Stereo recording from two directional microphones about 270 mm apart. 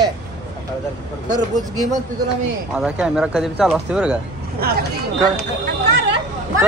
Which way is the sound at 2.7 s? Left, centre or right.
Centre.